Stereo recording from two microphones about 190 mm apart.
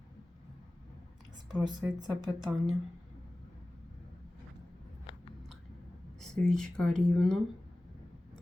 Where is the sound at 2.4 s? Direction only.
Centre (ahead or behind).